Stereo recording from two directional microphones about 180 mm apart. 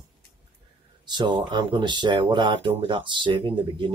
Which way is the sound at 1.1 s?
25° right (ahead or behind).